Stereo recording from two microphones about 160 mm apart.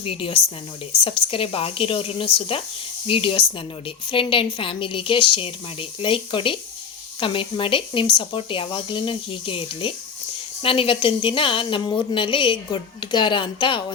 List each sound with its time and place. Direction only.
0.0 s a woman's voice: 35° left (ahead or behind)